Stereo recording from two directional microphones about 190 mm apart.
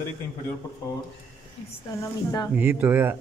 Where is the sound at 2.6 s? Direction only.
10° right (ahead or behind).